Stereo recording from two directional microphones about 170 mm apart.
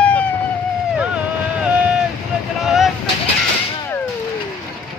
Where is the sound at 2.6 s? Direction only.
Centre (ahead or behind).